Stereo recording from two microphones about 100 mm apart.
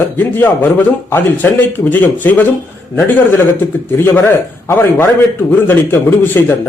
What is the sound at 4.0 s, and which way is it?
Speech, 25° left (ahead or behind).